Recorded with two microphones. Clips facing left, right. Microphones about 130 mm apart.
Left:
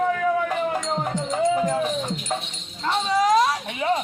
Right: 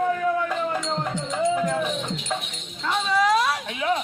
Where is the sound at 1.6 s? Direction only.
35° left (ahead or behind).